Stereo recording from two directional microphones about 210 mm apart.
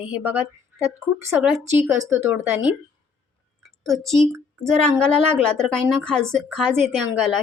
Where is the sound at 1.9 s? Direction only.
15° right (ahead or behind).